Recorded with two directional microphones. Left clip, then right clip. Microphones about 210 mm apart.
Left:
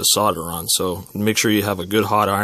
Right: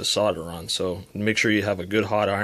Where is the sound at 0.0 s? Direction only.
30° left (ahead or behind).